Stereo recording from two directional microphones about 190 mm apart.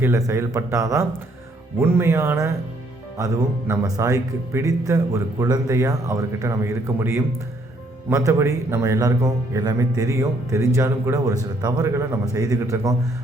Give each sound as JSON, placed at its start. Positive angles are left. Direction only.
{"t": 0.0, "sound": "speech", "side_deg": -15}
{"t": 3.7, "sound": "speech", "side_deg": -15}